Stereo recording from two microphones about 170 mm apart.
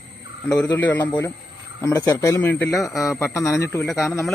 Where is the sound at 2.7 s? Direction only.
Centre (ahead or behind).